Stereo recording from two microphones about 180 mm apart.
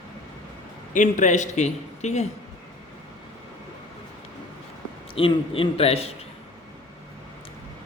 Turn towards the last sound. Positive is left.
turn(degrees=35)  # may be behind; listen again after turning